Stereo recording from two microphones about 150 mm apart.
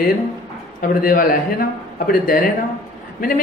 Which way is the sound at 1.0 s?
70° left (ahead or behind).